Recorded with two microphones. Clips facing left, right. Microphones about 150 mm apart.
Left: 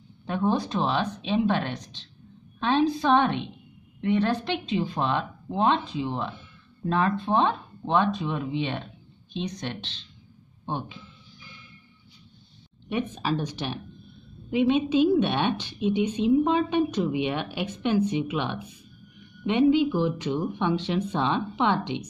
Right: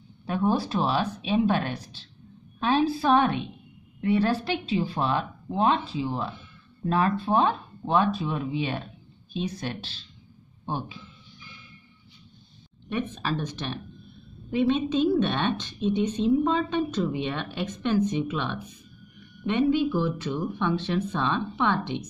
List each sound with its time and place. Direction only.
0.3 s speech: 5° right (ahead or behind)
12.9 s a woman's voice: 15° left (ahead or behind)